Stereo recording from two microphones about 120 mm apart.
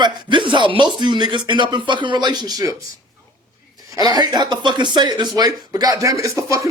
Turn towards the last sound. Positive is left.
turn(degrees=-25)  # may be behind; listen again after turning